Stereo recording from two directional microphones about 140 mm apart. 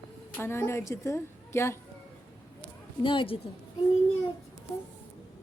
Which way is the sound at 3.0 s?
35° left (ahead or behind).